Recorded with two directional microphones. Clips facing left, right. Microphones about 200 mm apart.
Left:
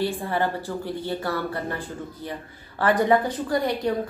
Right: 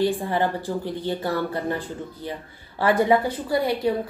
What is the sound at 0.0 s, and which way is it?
A woman's voice, 15° right (ahead or behind).